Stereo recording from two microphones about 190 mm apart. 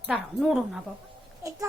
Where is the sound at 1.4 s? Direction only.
15° right (ahead or behind).